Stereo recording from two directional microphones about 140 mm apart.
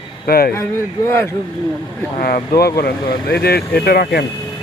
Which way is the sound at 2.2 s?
90° left.